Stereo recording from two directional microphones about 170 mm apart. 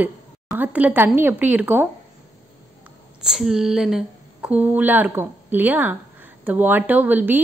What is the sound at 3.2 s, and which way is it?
Speech, 5° right (ahead or behind).